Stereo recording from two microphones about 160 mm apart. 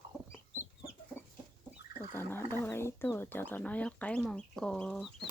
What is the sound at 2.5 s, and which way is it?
Speech, 15° left (ahead or behind).